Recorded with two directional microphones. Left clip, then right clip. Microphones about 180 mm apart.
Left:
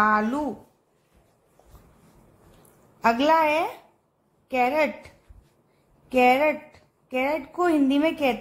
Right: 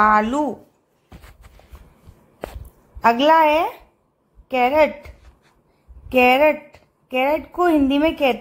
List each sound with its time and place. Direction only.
0.0 s a woman's voice: 30° right (ahead or behind)
3.0 s a woman's voice: 25° right (ahead or behind)
6.0 s a woman's voice: 25° right (ahead or behind)